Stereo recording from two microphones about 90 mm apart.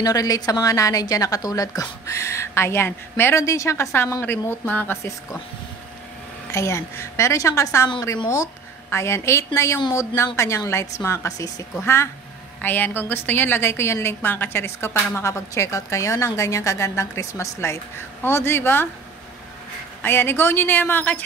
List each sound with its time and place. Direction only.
0.0 s a woman's voice: 40° left (ahead or behind); by 4.9 s 20° left (ahead or behind)
6.5 s a woman's voice: 35° left (ahead or behind)
8.9 s a woman's voice: 30° left (ahead or behind)
12.6 s a woman's voice: 20° left (ahead or behind)
20.0 s a woman's voice: 25° left (ahead or behind)